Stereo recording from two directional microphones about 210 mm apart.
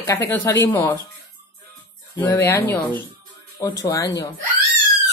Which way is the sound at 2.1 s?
15° left (ahead or behind).